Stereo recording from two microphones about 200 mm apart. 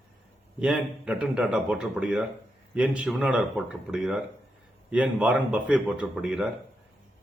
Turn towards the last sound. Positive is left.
turn(degrees=-5)  # may be behind; listen again after turning